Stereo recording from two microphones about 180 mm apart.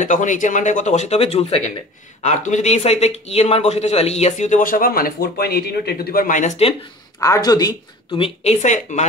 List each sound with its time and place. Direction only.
0.0 s a man's voice: 45° left (ahead or behind)
7.2 s speech: 20° left (ahead or behind); by 9.0 s 40° left (ahead or behind)